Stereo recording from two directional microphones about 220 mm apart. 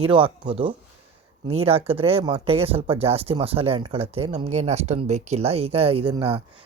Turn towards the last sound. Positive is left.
turn(degrees=-25)  # may be behind; listen again after turning